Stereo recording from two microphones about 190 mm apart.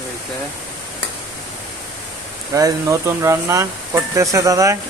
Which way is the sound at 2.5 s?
15° right (ahead or behind).